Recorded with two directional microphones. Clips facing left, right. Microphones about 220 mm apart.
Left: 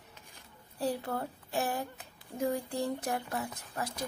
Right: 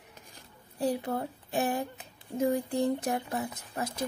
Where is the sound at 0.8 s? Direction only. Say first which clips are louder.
Right 3 dB; 15° right (ahead or behind).